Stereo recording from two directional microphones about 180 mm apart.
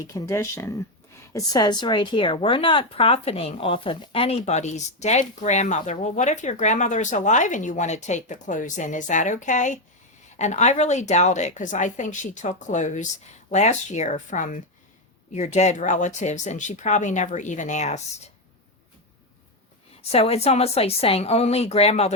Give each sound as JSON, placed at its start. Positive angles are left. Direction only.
{"t": 0.0, "sound": "speech", "side_deg": 15}
{"t": 20.0, "sound": "speech", "side_deg": 35}